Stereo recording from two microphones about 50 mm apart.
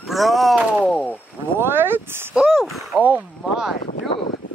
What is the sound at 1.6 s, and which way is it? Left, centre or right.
Speech, right.